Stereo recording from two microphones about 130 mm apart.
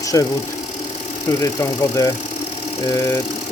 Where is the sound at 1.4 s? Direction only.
25° left (ahead or behind).